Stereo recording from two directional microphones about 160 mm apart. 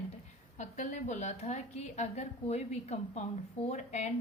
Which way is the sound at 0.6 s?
50° left (ahead or behind).